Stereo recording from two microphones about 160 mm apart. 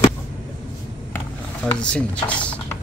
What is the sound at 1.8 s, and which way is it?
Mechanisms, 5° left (ahead or behind).